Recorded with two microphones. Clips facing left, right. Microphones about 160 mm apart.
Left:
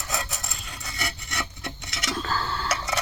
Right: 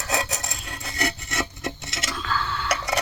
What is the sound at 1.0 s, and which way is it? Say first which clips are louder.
Filing: right 6 dB; 45° right (ahead or behind).